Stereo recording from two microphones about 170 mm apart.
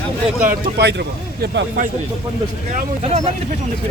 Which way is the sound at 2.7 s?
40° right (ahead or behind).